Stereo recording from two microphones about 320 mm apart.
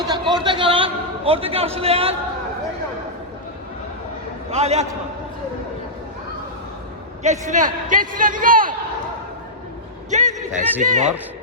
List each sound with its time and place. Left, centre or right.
0.1 s a sound: centre
4.5 s a man's voice: centre
7.2 s a man's voice: right
10.1 s a man's voice: right